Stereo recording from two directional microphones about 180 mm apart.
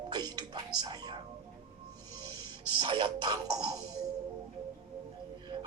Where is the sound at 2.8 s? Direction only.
25° right (ahead or behind).